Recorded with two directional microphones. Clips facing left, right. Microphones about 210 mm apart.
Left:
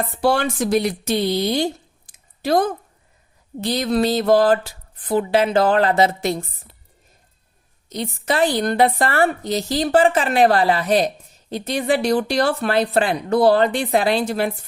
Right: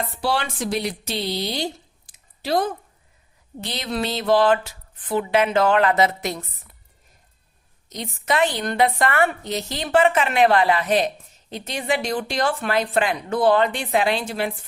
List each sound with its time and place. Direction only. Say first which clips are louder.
0.2 s a woman's voice: left 7 dB; 45° left (ahead or behind); by 6.7 s 30° left (ahead or behind)
7.9 s a woman's voice: left 2 dB; 35° left (ahead or behind)